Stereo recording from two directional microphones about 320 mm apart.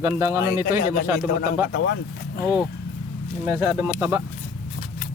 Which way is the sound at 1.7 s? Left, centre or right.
Left.